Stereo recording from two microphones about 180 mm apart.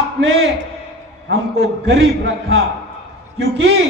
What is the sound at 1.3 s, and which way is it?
A man's voice, 70° right (ahead or behind).